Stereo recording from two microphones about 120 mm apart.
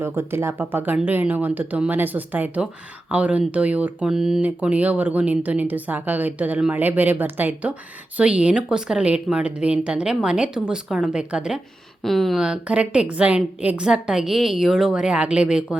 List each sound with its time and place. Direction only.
0.0 s speech: 20° right (ahead or behind)